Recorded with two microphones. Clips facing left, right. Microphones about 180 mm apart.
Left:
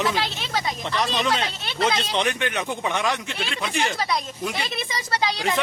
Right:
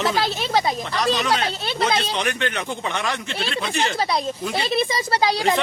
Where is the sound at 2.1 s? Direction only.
20° left (ahead or behind).